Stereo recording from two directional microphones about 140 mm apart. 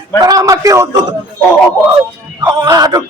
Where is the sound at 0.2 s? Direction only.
25° right (ahead or behind).